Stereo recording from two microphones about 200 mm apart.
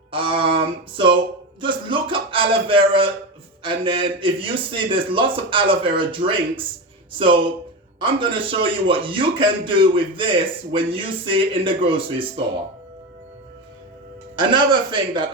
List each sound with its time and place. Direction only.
0.1 s a sound: 25° right (ahead or behind)
3.6 s speech: 25° right (ahead or behind)
14.3 s speech: 20° right (ahead or behind)